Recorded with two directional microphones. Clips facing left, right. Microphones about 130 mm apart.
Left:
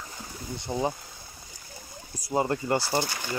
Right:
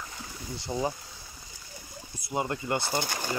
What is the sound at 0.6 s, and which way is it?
Speech, 20° left (ahead or behind).